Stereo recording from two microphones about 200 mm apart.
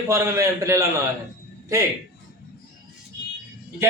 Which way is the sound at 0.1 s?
15° right (ahead or behind).